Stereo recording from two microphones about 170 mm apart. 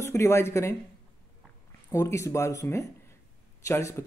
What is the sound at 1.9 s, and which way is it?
Speech, 20° left (ahead or behind).